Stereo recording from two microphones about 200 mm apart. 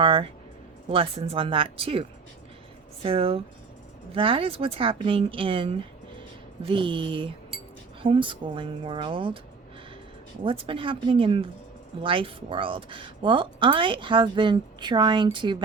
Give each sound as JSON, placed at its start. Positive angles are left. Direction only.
{"t": 0.0, "sound": "a woman's voice", "side_deg": -30}
{"t": 10.4, "sound": "a woman's voice", "side_deg": -25}